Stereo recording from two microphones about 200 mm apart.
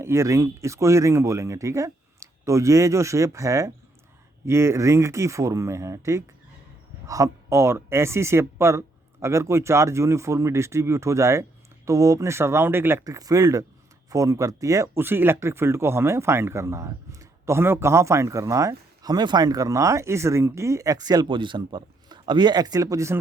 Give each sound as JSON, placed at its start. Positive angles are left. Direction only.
{"t": 0.0, "sound": "speech", "side_deg": -15}